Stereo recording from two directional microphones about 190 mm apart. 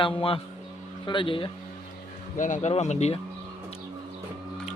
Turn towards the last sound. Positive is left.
turn(degrees=35)  # may be behind; listen again after turning